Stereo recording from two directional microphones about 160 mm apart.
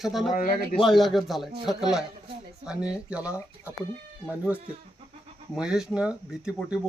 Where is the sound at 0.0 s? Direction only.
Centre (ahead or behind).